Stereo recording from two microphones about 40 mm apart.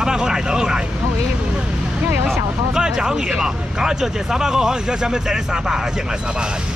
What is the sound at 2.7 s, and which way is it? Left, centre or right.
Vehicle, centre.